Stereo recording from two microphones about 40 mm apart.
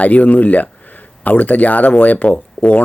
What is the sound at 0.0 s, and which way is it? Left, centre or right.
Speech, left.